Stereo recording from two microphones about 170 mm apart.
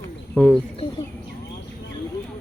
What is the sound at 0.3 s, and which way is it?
Speech, 5° left (ahead or behind).